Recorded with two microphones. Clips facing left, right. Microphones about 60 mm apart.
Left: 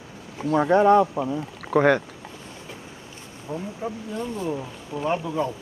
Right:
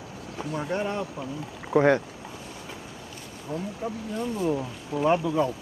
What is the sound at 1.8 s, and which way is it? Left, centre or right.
Speech, left.